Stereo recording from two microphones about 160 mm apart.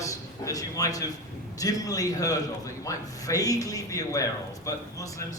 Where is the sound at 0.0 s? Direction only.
20° left (ahead or behind).